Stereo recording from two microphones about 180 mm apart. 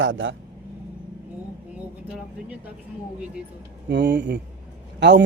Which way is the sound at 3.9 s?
70° right (ahead or behind).